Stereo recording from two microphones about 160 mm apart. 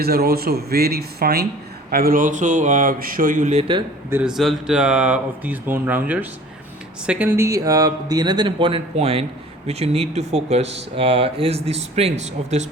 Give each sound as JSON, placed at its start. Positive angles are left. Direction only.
{"t": 0.0, "sound": "speech", "side_deg": -75}
{"t": 4.1, "sound": "speech", "side_deg": -5}